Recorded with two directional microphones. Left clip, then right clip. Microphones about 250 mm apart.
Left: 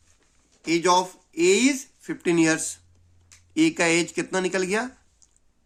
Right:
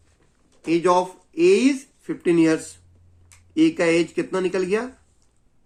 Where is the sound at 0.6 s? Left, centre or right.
Left.